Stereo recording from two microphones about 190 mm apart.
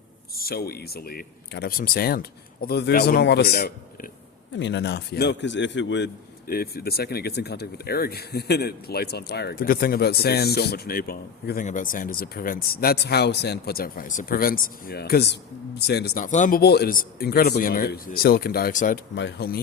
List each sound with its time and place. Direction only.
0.3 s speech: 55° left (ahead or behind)
4.5 s a man's voice: 70° left (ahead or behind)
6.5 s speech: 55° left (ahead or behind)
19.1 s speech: 60° left (ahead or behind)